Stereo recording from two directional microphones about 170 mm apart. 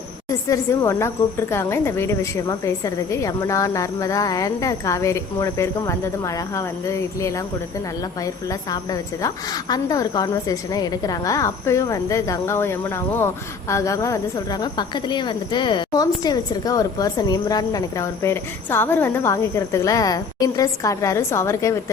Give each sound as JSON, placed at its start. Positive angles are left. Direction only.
{"t": 0.3, "sound": "a woman's voice", "side_deg": 20}